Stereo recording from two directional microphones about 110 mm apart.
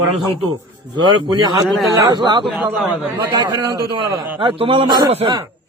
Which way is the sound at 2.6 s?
15° right (ahead or behind).